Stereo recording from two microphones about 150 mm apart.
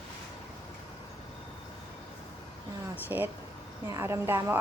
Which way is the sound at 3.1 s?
20° right (ahead or behind).